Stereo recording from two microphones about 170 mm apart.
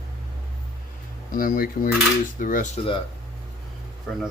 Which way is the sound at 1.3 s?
55° left (ahead or behind).